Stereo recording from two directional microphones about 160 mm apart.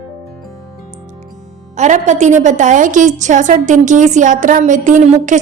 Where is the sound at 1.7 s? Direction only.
45° right (ahead or behind).